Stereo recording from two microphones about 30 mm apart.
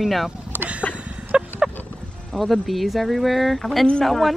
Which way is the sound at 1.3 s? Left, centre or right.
Right.